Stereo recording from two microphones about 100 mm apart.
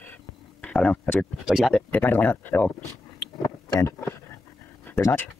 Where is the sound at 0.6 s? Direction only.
15° left (ahead or behind).